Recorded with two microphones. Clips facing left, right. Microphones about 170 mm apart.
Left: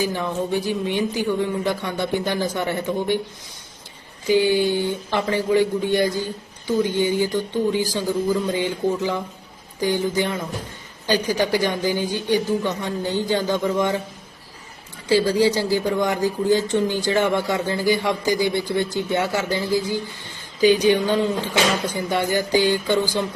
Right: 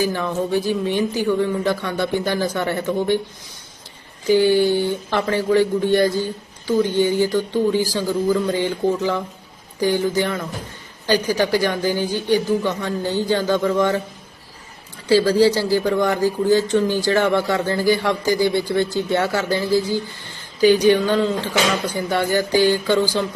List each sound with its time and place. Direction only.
0.0 s a man's voice: 15° left (ahead or behind)
4.3 s a man's voice: 15° left (ahead or behind)
15.1 s a man's voice: 20° left (ahead or behind)